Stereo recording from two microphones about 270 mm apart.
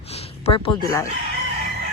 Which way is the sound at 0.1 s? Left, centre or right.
Left.